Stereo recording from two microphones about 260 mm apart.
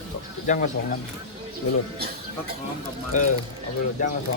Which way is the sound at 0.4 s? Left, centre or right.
Left.